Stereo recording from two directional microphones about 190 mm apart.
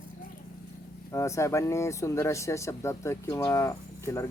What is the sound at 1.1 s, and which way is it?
Speech, 15° left (ahead or behind).